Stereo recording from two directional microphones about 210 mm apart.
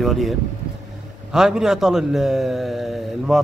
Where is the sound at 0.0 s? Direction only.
Centre (ahead or behind).